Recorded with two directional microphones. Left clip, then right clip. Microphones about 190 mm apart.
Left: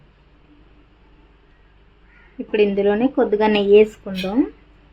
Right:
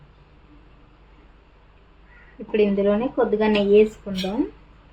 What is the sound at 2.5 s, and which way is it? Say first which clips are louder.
Speech: left 3 dB; 60° left (ahead or behind).